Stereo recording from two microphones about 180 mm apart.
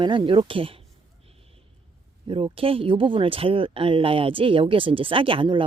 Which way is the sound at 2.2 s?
30° right (ahead or behind).